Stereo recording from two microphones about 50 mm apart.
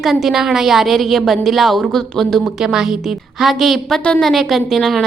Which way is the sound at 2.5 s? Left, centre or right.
Centre.